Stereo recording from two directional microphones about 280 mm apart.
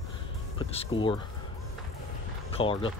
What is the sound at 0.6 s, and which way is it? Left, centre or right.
Speech, centre.